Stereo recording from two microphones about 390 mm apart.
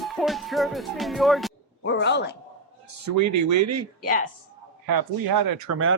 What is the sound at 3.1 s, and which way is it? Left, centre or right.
Speech, right.